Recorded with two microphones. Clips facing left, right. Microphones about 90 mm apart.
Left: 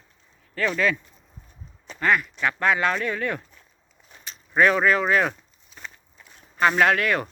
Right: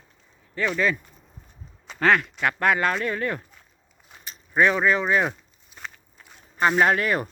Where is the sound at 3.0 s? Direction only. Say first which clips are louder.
Even; 35° right (ahead or behind).